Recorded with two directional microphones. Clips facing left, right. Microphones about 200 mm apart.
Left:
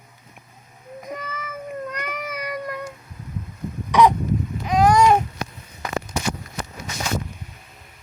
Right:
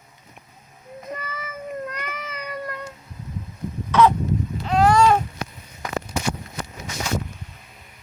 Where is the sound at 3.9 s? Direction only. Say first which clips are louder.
Left 1 dB; 15° left (ahead or behind).